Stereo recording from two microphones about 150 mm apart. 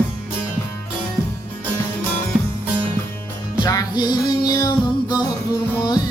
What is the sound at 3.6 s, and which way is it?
Music, 25° left (ahead or behind).